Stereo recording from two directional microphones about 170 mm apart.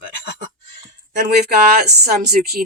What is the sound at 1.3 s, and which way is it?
Speech, 70° right (ahead or behind).